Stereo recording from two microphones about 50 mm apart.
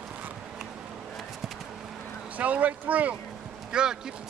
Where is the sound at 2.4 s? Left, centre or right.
Right.